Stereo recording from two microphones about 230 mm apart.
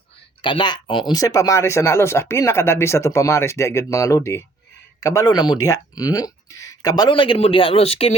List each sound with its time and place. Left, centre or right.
0.4 s speech: centre